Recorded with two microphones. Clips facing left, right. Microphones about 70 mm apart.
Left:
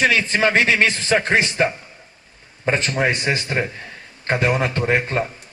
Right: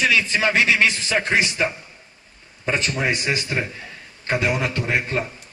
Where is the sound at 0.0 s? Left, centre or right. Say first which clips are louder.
Left 2 dB; left.